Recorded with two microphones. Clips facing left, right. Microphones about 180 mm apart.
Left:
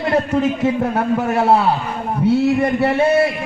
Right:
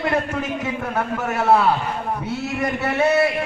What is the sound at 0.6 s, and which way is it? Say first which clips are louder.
Speech: left 7 dB; 35° left (ahead or behind).